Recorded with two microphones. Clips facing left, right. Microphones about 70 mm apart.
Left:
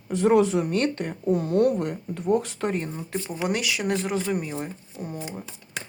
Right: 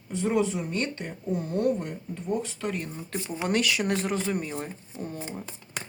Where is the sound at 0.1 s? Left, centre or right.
Left.